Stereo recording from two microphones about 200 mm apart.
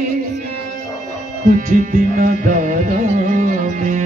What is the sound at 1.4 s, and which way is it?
Music, 40° right (ahead or behind).